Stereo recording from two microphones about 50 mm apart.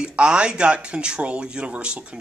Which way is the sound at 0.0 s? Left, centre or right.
Centre.